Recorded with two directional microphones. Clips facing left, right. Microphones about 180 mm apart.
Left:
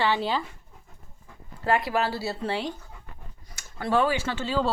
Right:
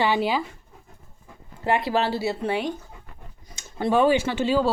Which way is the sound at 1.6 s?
25° right (ahead or behind).